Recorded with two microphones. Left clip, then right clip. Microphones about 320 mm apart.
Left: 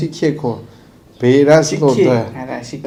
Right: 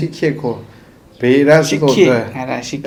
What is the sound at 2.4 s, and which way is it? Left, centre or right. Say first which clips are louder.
Speech: right 4 dB; right.